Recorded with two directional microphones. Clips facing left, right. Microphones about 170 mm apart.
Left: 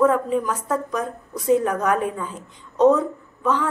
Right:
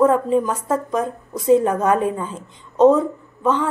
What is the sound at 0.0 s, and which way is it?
A woman's voice, 30° right (ahead or behind).